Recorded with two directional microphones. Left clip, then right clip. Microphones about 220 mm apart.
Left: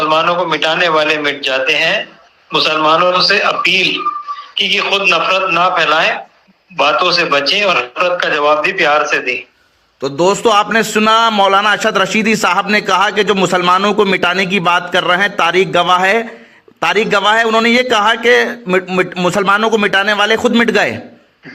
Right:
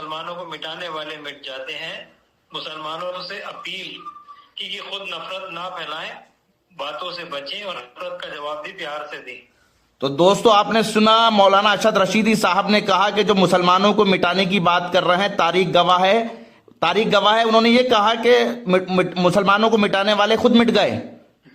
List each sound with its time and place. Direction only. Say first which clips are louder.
0.0 s a man's voice: left 17 dB; 25° left (ahead or behind)
3.9 s a sound: left 19 dB; 25° left (ahead or behind)
5.0 s a man's voice: left 18 dB; 25° left (ahead or behind)
9.0 s a man's voice: left 18 dB; 55° left (ahead or behind)
10.0 s a man's voice: left 3 dB; 10° left (ahead or behind)